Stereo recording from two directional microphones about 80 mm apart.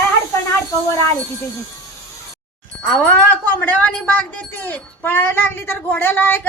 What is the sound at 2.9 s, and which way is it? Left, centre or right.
A woman's voice, left.